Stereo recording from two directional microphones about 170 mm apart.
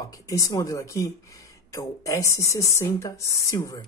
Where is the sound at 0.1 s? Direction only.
20° left (ahead or behind).